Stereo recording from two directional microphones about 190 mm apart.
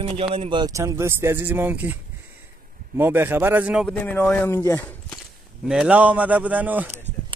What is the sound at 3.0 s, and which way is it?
Speech, 10° right (ahead or behind).